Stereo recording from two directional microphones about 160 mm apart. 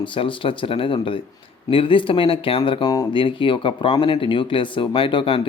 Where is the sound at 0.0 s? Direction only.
30° left (ahead or behind).